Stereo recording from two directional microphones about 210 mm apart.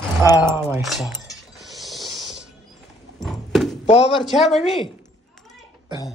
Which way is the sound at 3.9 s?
30° left (ahead or behind).